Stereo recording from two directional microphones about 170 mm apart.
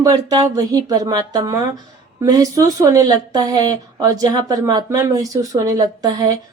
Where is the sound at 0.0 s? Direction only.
20° right (ahead or behind).